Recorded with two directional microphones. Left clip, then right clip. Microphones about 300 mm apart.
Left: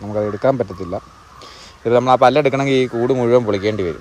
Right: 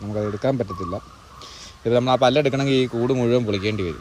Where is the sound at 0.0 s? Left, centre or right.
Centre.